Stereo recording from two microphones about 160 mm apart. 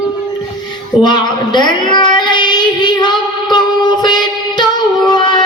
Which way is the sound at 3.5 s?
25° left (ahead or behind).